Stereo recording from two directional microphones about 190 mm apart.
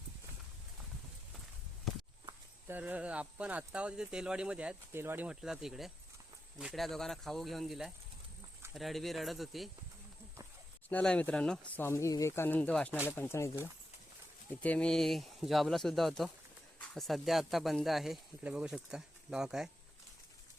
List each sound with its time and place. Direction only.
2.6 s speech: 10° right (ahead or behind)
10.8 s speech: 5° left (ahead or behind)